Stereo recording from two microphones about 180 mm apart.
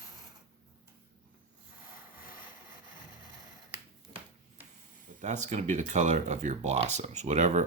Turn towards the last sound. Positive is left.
turn(degrees=-40)  # may be behind; listen again after turning